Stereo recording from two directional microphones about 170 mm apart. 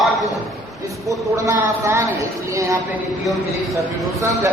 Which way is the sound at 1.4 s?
15° right (ahead or behind).